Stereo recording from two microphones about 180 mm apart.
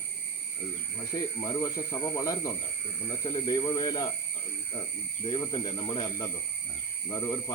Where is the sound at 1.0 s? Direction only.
20° left (ahead or behind).